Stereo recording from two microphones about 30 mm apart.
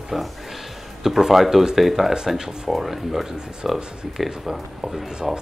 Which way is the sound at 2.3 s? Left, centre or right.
Centre.